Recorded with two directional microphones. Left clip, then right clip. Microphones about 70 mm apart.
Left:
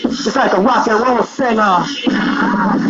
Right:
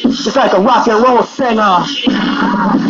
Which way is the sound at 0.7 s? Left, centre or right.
Left.